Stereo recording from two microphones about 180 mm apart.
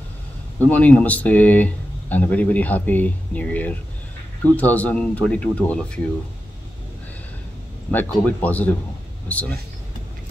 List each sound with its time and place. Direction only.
0.6 s speech: 10° left (ahead or behind)
7.9 s speech: 10° left (ahead or behind)